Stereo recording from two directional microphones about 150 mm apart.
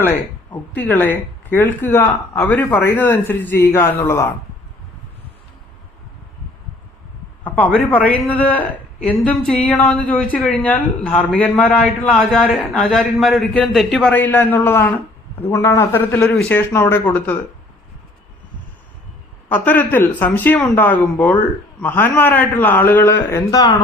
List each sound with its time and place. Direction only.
0.8 s speech: 10° left (ahead or behind)
7.4 s speech: 10° left (ahead or behind)
19.5 s speech: 10° left (ahead or behind)